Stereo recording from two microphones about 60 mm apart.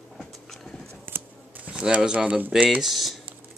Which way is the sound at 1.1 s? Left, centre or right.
Right.